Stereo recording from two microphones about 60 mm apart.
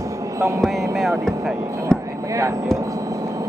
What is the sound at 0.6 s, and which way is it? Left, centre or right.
Speech, centre.